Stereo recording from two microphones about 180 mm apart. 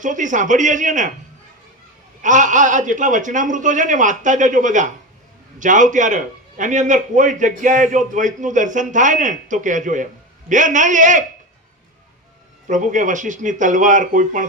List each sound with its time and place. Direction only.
0.0 s a man's voice: 45° right (ahead or behind)
2.2 s a man's voice: 45° right (ahead or behind)
12.6 s a man's voice: 45° right (ahead or behind)